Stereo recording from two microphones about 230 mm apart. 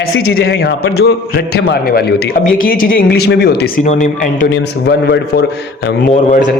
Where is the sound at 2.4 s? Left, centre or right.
Left.